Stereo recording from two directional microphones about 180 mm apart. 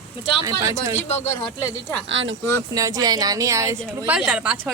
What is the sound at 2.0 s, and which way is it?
Speech, 90° right.